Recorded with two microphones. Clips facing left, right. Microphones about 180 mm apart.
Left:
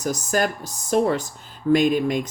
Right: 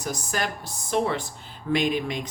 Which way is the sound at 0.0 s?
45° left (ahead or behind).